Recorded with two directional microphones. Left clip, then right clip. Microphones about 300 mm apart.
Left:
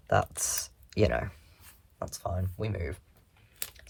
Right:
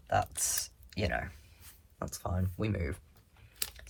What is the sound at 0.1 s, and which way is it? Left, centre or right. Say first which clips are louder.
Speech: left 3 dB; centre.